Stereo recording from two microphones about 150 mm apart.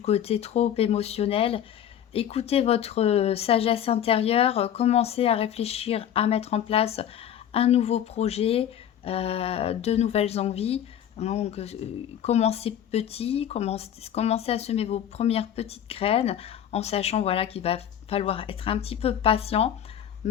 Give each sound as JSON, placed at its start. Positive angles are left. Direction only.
{"t": 0.0, "sound": "speech", "side_deg": 45}